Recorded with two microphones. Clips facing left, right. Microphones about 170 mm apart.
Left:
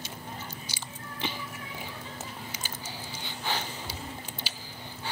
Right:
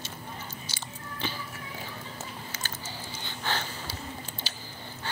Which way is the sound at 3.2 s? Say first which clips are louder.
Right 1 dB; 10° left (ahead or behind).